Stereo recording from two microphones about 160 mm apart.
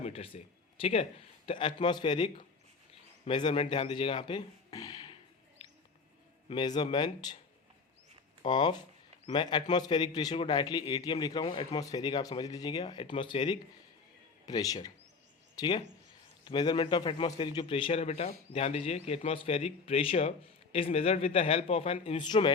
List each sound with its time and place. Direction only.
0.0 s speech: 35° left (ahead or behind)
6.5 s a man's voice: 30° left (ahead or behind)
8.4 s a man's voice: 30° left (ahead or behind)